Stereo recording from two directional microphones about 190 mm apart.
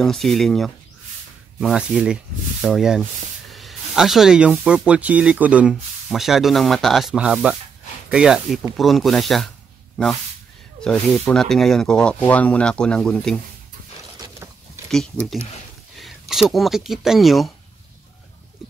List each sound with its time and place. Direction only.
0.0 s speech: centre (ahead or behind)
10.8 s speech: 5° left (ahead or behind)
14.1 s mechanisms: 20° right (ahead or behind)
14.9 s speech: centre (ahead or behind)